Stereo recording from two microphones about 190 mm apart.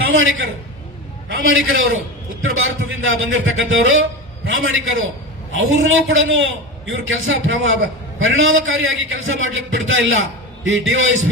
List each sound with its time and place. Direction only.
0.1 s a man's voice: 90° right
6.1 s a man's voice: 85° right